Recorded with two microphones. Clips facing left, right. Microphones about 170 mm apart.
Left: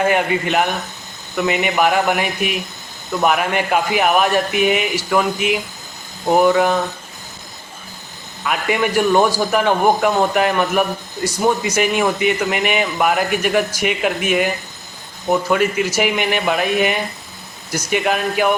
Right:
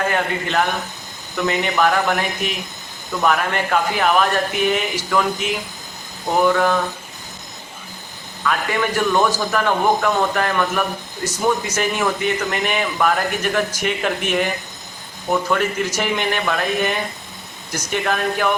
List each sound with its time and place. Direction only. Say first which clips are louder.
0.1 s a man's voice: left 4 dB; 15° left (ahead or behind)
8.4 s a man's voice: left 2 dB; 15° left (ahead or behind)